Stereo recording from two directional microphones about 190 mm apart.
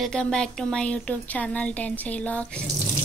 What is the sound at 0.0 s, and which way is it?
Speech, 5° left (ahead or behind).